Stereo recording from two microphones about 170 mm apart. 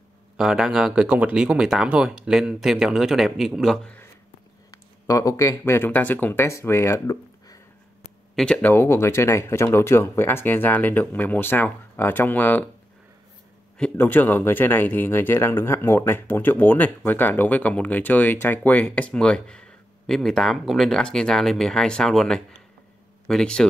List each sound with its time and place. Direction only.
0.4 s speech: 5° right (ahead or behind)
5.0 s speech: 20° left (ahead or behind)
8.4 s speech: 10° left (ahead or behind)
13.7 s speech: 10° left (ahead or behind)